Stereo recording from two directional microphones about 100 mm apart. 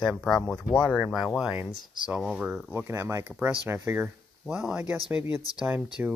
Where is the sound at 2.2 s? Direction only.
Centre (ahead or behind).